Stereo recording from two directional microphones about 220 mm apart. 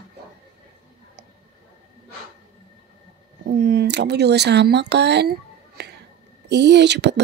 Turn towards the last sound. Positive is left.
turn(degrees=-50)  # may be behind; listen again after turning